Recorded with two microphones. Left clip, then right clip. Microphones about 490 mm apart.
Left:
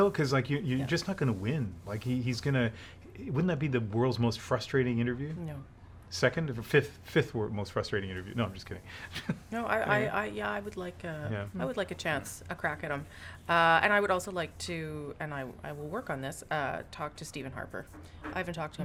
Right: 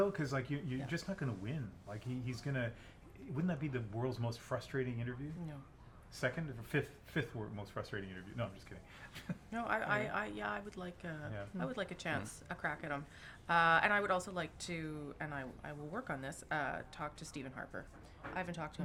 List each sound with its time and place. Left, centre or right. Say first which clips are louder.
0.0 s speech: left 9 dB; left
6.1 s speech: left 10 dB; left
9.5 s a woman's voice: left 7 dB; left